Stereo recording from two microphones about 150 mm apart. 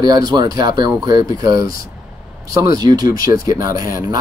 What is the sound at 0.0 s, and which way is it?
Speech, 25° right (ahead or behind).